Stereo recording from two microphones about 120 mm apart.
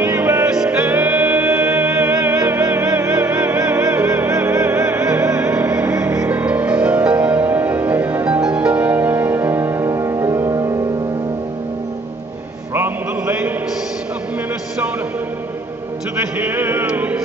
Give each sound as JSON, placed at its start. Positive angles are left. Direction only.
{"t": 0.0, "sound": "music", "side_deg": -15}
{"t": 12.7, "sound": "a sound", "side_deg": -15}
{"t": 16.3, "sound": "music", "side_deg": -15}